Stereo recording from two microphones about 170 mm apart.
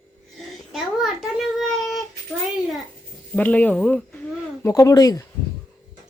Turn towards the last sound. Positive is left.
turn(degrees=20)  # may be behind; listen again after turning